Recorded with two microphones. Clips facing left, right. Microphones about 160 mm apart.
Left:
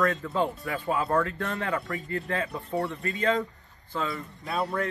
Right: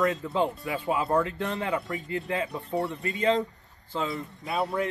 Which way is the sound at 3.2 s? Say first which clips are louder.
Right 2 dB; 25° right (ahead or behind).